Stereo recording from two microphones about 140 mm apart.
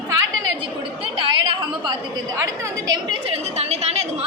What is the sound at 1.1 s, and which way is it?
A woman's voice, 40° right (ahead or behind).